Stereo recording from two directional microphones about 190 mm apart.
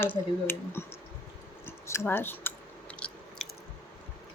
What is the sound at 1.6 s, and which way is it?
Chewing, 15° left (ahead or behind).